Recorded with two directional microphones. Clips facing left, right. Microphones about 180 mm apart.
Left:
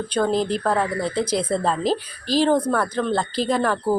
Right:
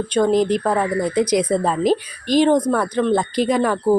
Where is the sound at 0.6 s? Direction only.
10° right (ahead or behind).